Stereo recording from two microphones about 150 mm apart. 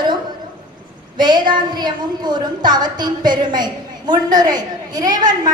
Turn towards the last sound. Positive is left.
turn(degrees=-25)  # may be behind; listen again after turning